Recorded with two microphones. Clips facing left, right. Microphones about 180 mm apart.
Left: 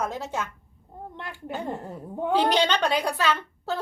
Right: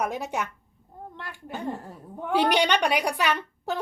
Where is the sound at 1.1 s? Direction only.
20° left (ahead or behind).